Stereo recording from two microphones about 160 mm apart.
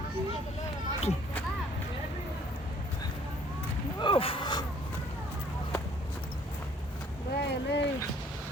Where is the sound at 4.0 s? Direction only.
35° left (ahead or behind).